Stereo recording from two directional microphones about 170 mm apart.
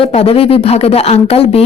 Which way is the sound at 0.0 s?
35° left (ahead or behind).